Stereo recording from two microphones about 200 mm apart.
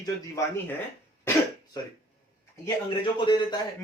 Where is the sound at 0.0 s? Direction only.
15° left (ahead or behind).